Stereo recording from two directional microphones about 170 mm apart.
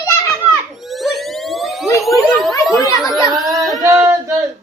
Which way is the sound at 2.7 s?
20° left (ahead or behind).